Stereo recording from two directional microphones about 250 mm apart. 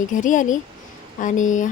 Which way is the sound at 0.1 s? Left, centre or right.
Left.